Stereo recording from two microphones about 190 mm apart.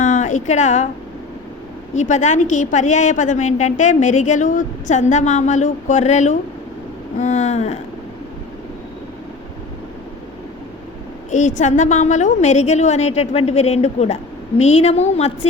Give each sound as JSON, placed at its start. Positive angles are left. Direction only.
{"t": 0.0, "sound": "a sound", "side_deg": 40}
{"t": 2.0, "sound": "a woman's voice", "side_deg": 40}
{"t": 11.3, "sound": "a woman's voice", "side_deg": 40}